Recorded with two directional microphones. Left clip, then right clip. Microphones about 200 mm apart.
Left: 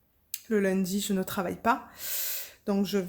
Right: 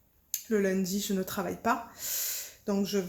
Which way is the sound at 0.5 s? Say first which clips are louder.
Left 1 dB; 35° left (ahead or behind).